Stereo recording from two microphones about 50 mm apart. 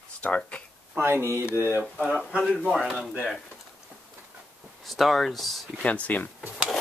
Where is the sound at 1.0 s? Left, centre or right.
Right.